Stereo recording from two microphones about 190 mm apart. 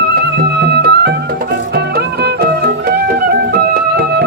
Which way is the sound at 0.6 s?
60° right (ahead or behind).